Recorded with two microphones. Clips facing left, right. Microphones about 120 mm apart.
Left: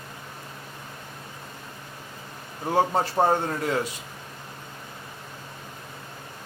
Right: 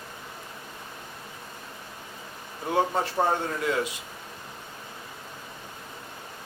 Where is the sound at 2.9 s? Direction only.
40° left (ahead or behind).